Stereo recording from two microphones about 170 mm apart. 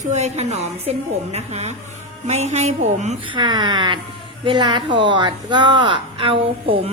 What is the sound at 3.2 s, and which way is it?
A woman's voice, 25° right (ahead or behind).